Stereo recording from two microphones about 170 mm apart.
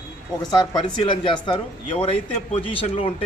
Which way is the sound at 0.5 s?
25° left (ahead or behind).